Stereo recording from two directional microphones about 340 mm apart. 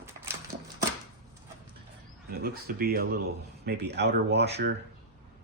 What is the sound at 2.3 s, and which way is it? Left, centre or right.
Speech, right.